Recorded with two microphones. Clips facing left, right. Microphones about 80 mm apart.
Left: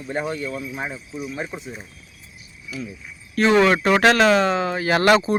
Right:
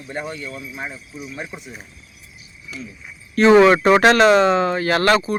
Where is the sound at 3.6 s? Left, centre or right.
Centre.